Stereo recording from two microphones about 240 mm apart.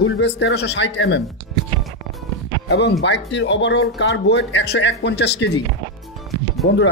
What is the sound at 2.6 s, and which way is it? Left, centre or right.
Speech, left.